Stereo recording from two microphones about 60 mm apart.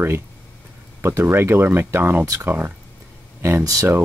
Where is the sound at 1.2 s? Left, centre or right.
Right.